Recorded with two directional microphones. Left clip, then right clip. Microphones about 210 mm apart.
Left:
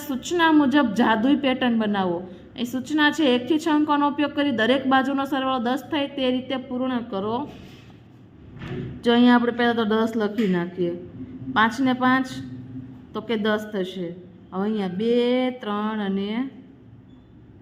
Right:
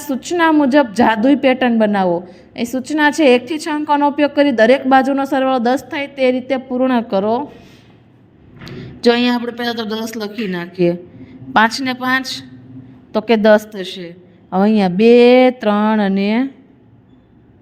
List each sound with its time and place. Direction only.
0.0 s a woman's voice: 25° right (ahead or behind)
9.0 s a woman's voice: 35° right (ahead or behind)
9.4 s speech: centre (ahead or behind)
9.9 s speech: 35° right (ahead or behind)